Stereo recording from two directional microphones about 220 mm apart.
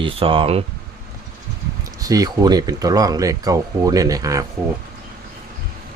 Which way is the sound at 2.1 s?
15° right (ahead or behind).